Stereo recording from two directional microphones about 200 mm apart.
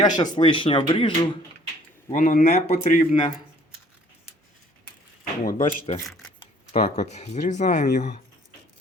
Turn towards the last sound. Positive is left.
turn(degrees=35)  # may be behind; listen again after turning